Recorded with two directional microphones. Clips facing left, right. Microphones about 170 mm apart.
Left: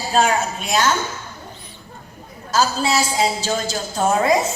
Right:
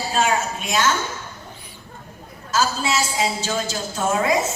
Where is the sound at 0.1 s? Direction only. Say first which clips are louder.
Left 4 dB; 35° left (ahead or behind).